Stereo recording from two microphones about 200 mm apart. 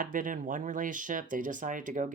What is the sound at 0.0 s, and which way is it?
Speech, 40° right (ahead or behind).